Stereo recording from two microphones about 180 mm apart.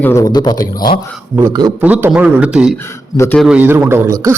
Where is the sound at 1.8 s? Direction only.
10° right (ahead or behind).